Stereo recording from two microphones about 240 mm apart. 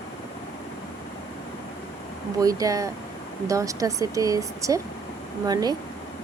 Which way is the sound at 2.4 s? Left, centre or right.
Centre.